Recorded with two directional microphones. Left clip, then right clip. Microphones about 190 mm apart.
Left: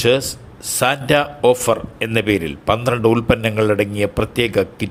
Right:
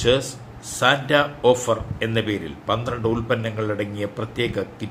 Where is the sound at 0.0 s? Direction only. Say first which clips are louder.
Left 4 dB; 45° left (ahead or behind).